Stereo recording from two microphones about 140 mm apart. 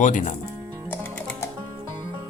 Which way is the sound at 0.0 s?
60° left (ahead or behind).